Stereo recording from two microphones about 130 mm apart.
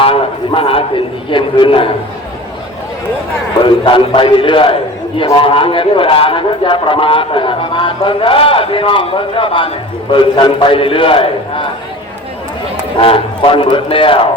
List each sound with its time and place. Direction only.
0.0 s a man's voice: 45° left (ahead or behind)
3.8 s a man's voice: 40° left (ahead or behind)
13.0 s a man's voice: 45° left (ahead or behind)